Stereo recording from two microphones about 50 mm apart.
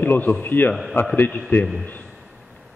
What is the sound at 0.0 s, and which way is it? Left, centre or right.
A man's voice, left.